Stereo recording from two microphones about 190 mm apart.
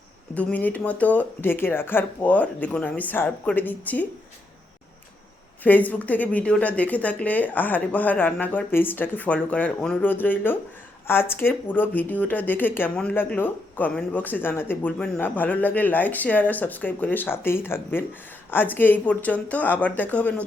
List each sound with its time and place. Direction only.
0.3 s speech: 10° left (ahead or behind)
5.6 s speech: 10° left (ahead or behind)